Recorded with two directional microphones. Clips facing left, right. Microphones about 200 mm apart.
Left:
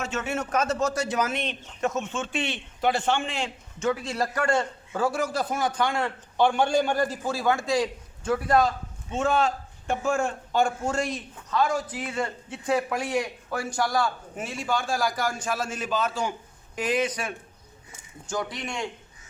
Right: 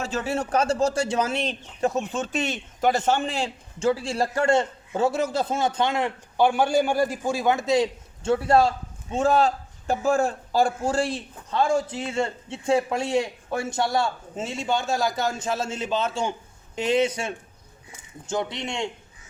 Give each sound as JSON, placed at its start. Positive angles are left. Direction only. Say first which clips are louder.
{"t": 0.0, "sound": "a man's voice", "louder": "right 3 dB", "side_deg": -35}
{"t": 6.3, "sound": "a man's voice", "louder": "right 2 dB", "side_deg": -10}